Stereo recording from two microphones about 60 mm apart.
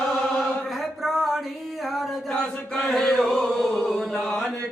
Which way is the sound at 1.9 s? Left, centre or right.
Centre.